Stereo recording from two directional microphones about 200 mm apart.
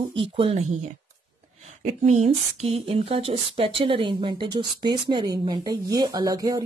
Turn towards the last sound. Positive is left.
turn(degrees=-15)  # may be behind; listen again after turning